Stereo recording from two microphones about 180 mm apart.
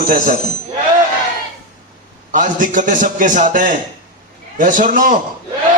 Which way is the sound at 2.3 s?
45° right (ahead or behind).